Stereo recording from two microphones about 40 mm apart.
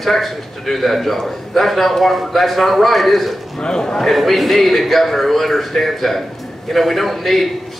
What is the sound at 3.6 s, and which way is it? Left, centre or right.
Speech, centre.